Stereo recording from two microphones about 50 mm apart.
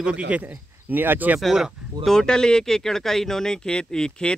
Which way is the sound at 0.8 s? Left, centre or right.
Right.